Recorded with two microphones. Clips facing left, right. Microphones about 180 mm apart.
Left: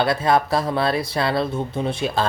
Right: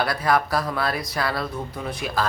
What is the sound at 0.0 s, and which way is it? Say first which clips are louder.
Speech: left 3 dB; 25° left (ahead or behind).